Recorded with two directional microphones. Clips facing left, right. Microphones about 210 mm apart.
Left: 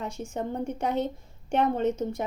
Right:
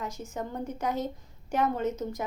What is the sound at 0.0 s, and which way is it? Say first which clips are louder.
A woman's voice: left 3 dB; 30° left (ahead or behind).